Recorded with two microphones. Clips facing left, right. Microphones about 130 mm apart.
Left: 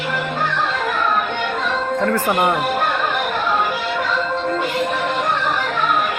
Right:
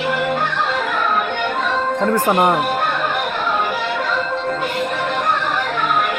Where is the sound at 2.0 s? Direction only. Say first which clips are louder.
Right 3 dB; 15° right (ahead or behind).